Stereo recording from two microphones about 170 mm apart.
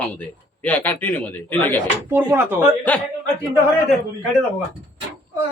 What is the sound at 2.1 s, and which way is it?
Speech, 15° right (ahead or behind).